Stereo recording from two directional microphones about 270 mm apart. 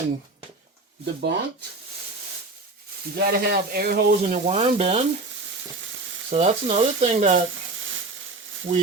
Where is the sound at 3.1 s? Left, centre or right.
Right.